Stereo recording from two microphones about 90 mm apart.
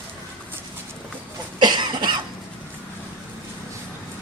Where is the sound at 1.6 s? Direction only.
55° right (ahead or behind).